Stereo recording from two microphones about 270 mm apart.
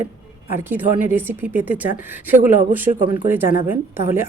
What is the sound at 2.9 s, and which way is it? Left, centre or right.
Speech, right.